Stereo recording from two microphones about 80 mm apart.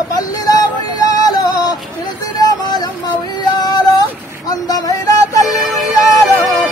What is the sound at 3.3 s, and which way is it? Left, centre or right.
Music, left.